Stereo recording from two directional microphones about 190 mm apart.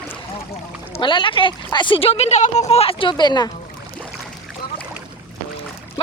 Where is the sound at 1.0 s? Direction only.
25° left (ahead or behind).